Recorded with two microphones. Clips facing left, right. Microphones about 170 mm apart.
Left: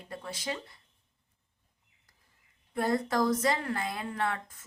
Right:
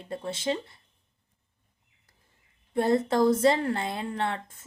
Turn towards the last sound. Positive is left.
turn(degrees=-25)  # may be behind; listen again after turning